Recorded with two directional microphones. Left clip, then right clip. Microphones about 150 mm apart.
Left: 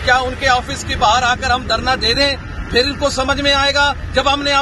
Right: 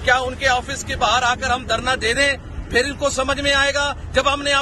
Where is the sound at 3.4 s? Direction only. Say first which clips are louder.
Left 5 dB; 10° right (ahead or behind).